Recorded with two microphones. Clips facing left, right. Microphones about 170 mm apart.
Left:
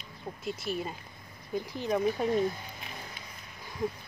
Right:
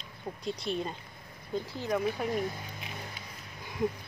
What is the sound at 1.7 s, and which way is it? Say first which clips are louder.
Speech: left 3 dB; 20° left (ahead or behind).